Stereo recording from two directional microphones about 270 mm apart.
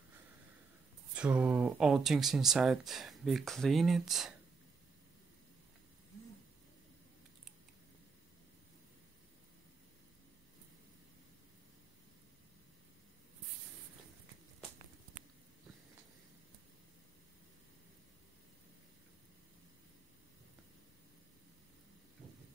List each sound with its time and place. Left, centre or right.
1.1 s speech: centre